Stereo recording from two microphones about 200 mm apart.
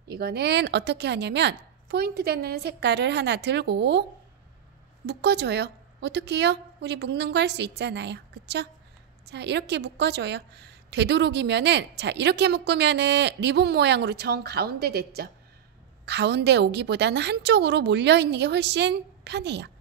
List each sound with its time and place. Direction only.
0.1 s a woman's voice: 55° right (ahead or behind)
5.0 s a woman's voice: 55° right (ahead or behind)